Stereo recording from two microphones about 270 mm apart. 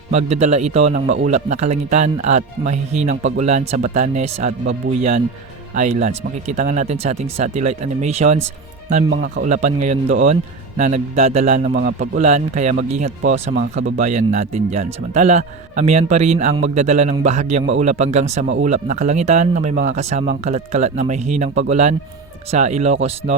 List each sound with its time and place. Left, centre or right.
0.1 s speech: right
1.0 s speech: right
1.3 s speech: right
9.0 s speech: right
9.4 s speech: right